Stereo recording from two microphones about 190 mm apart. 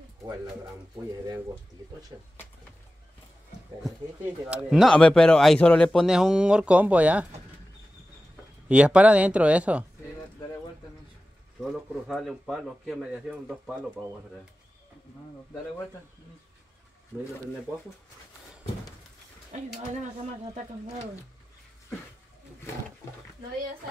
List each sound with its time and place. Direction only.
0.2 s speech: 15° right (ahead or behind)
4.2 s a man's voice: 10° right (ahead or behind)
8.6 s speech: 5° right (ahead or behind)
11.6 s a man's voice: centre (ahead or behind)